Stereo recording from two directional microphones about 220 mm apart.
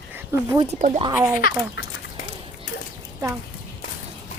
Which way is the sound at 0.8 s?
30° right (ahead or behind).